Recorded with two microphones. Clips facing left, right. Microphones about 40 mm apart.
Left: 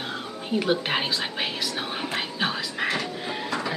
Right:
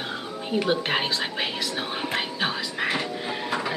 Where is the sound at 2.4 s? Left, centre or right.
Centre.